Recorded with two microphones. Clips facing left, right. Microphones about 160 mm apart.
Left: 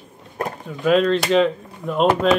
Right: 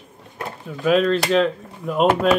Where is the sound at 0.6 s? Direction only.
Centre (ahead or behind).